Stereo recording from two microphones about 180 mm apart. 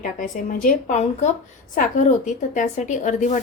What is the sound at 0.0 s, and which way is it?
A woman's voice, 50° left (ahead or behind).